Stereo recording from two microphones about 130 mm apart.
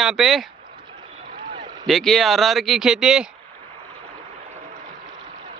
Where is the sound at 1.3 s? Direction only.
35° right (ahead or behind).